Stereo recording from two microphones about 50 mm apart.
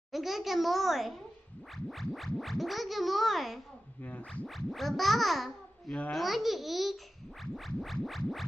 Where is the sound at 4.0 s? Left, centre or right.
Left.